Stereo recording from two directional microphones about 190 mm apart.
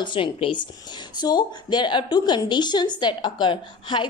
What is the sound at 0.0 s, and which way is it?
A woman's voice, 25° left (ahead or behind).